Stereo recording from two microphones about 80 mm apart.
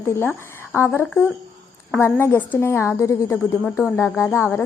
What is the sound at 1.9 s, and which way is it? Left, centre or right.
A woman's voice, left.